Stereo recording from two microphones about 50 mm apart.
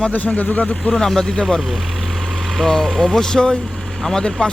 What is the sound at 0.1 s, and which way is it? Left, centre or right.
Speech, left.